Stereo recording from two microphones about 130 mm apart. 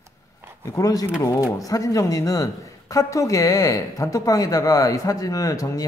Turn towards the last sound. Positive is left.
turn(degrees=25)  # may be behind; listen again after turning